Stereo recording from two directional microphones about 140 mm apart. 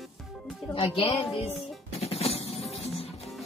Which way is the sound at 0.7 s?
40° left (ahead or behind).